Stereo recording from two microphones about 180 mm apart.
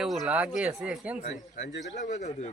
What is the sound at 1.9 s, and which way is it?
Speech, 40° left (ahead or behind).